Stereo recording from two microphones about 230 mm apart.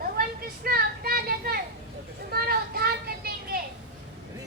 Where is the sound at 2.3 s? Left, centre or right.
Right.